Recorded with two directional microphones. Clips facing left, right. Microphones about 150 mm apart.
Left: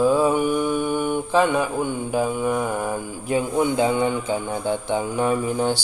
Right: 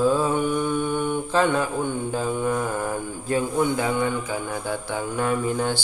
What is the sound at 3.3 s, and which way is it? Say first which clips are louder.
Speech: left 2 dB; 20° left (ahead or behind).